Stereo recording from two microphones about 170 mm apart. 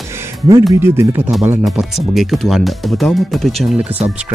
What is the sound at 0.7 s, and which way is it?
Speech, 15° right (ahead or behind).